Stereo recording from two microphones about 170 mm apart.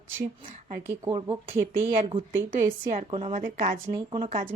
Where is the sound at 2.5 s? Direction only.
50° right (ahead or behind).